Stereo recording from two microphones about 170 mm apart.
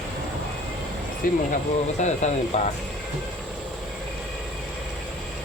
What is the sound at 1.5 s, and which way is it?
Speech, 45° left (ahead or behind).